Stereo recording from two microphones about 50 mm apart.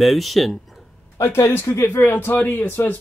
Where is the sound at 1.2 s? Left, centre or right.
Left.